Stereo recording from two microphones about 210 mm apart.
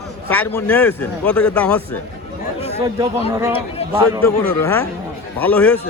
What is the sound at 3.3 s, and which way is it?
Speech, 10° right (ahead or behind).